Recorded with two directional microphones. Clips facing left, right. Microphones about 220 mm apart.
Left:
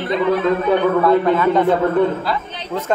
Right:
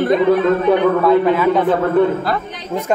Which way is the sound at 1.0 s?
5° right (ahead or behind).